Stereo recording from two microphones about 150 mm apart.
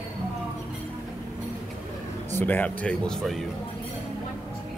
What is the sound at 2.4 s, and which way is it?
Speech, 10° left (ahead or behind).